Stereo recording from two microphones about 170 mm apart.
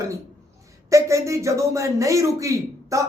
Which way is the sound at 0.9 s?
20° right (ahead or behind).